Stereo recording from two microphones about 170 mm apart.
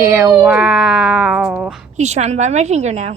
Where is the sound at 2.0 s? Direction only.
40° right (ahead or behind).